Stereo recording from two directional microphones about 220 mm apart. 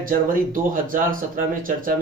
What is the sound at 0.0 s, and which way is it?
Speech, 40° right (ahead or behind).